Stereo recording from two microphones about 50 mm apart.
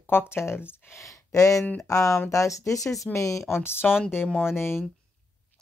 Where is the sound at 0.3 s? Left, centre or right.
Left.